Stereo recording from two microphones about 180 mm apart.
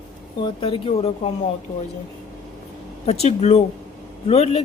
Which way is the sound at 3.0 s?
35° left (ahead or behind).